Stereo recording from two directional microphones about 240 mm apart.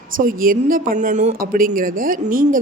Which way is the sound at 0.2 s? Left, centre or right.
Right.